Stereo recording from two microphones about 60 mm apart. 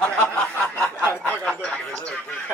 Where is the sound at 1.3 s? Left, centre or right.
Left.